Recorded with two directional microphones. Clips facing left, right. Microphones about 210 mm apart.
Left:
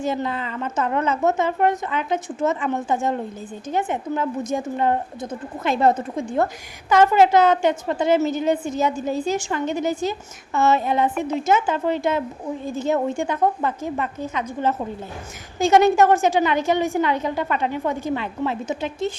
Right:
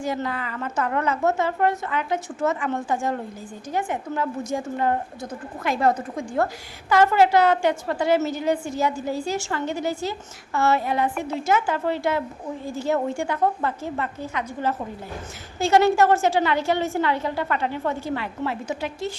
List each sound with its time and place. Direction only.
0.0 s a woman's voice: 20° left (ahead or behind)